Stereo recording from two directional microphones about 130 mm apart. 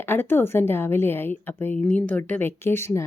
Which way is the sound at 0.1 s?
15° left (ahead or behind).